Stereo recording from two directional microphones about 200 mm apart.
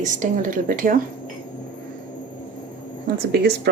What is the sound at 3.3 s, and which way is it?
Speech, 55° right (ahead or behind).